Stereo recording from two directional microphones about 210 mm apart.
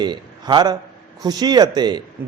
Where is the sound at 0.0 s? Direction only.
20° right (ahead or behind).